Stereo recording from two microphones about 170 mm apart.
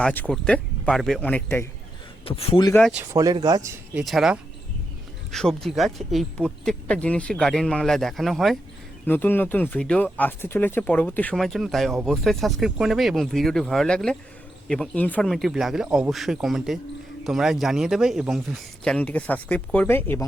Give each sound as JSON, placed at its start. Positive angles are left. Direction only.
{"t": 0.0, "sound": "speech", "side_deg": 10}
{"t": 2.2, "sound": "speech", "side_deg": 35}
{"t": 2.9, "sound": "speech", "side_deg": -15}
{"t": 3.9, "sound": "speech", "side_deg": 0}
{"t": 9.0, "sound": "speech", "side_deg": 10}